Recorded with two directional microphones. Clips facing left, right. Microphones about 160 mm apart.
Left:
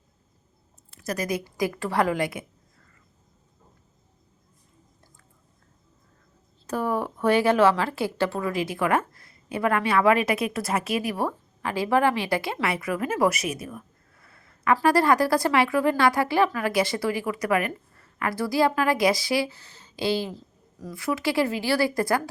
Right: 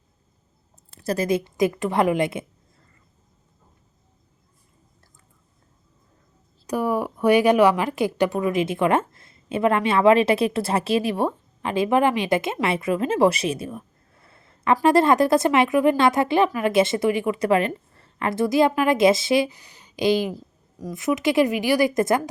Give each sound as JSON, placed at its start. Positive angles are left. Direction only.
{"t": 0.9, "sound": "a woman's voice", "side_deg": -30}
{"t": 6.7, "sound": "a woman's voice", "side_deg": -10}